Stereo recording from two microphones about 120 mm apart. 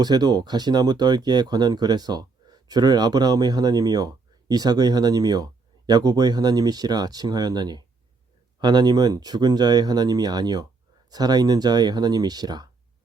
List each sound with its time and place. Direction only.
0.0 s speech: 35° right (ahead or behind)